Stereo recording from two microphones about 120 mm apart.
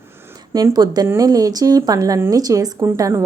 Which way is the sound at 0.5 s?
30° right (ahead or behind).